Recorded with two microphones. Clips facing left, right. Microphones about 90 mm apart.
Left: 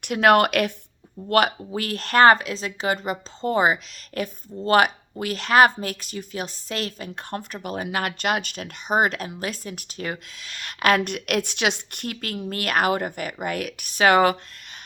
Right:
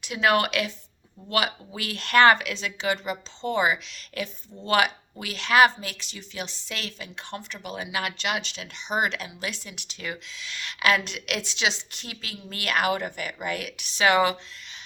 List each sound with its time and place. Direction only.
0.0 s a woman's voice: 55° left (ahead or behind)